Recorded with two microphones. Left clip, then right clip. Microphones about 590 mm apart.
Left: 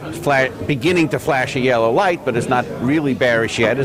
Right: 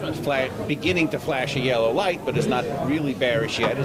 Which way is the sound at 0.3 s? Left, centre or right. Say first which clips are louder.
Left 9 dB; left.